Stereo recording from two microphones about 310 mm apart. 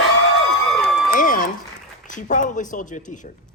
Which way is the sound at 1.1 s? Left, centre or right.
Left.